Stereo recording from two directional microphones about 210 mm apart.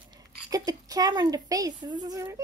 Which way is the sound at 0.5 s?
15° right (ahead or behind).